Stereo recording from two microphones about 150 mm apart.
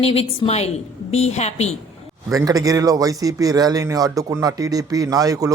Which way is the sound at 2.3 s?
25° right (ahead or behind).